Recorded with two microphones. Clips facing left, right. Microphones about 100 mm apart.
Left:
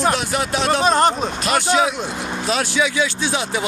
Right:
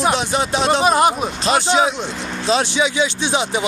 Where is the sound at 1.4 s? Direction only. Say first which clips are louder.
Right 2 dB; 25° right (ahead or behind).